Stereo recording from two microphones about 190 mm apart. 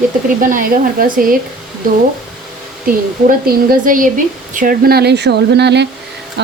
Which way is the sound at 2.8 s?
50° right (ahead or behind).